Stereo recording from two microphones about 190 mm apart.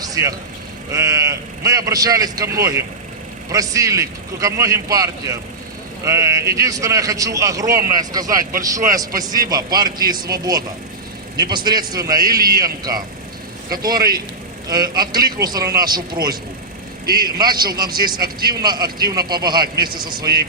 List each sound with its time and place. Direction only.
0.0 s vehicle: 20° right (ahead or behind)
0.9 s a man's voice: 15° right (ahead or behind)
17.2 s speech: 20° right (ahead or behind)